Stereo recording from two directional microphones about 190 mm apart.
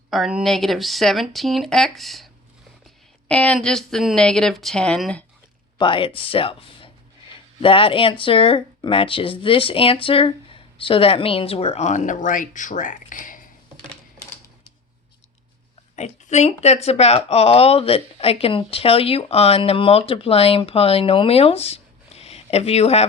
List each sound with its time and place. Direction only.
0.1 s speech: centre (ahead or behind)
5.7 s speech: 25° left (ahead or behind); by 13.5 s 45° left (ahead or behind)
16.0 s speech: 35° left (ahead or behind)